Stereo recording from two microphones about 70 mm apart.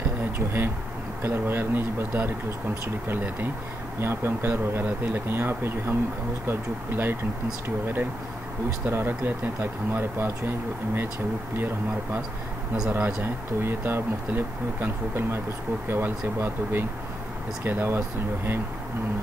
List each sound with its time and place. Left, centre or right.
1.2 s speech: right
11.5 s speech: right